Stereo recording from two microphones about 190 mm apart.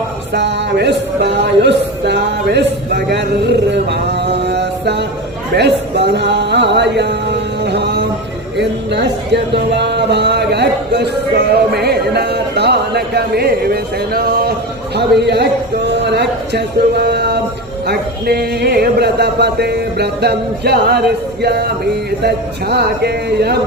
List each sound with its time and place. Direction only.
0.3 s speech: 65° right (ahead or behind)
3.7 s a sound: 65° right (ahead or behind)
5.5 s speech: 60° right (ahead or behind)